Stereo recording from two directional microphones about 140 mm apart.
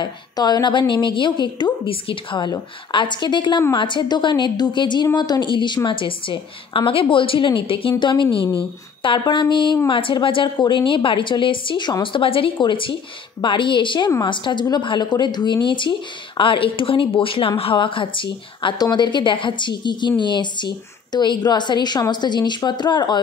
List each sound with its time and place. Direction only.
0.0 s a woman's voice: 30° left (ahead or behind)